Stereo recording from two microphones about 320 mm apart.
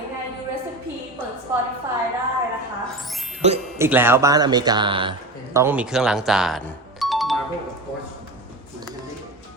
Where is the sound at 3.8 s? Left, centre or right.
Centre.